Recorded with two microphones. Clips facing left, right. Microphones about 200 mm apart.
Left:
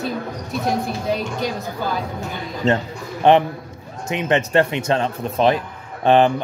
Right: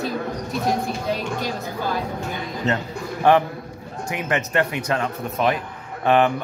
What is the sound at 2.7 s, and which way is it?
A man's voice, 20° left (ahead or behind).